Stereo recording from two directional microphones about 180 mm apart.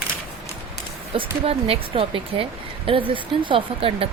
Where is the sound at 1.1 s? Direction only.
30° right (ahead or behind).